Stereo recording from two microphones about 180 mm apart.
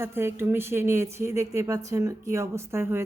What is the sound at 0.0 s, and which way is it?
Speech, 15° right (ahead or behind).